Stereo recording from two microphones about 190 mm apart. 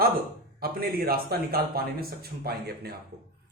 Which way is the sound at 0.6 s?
50° right (ahead or behind).